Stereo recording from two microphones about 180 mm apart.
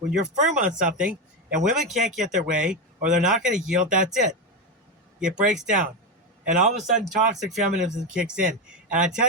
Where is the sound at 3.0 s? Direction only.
45° right (ahead or behind).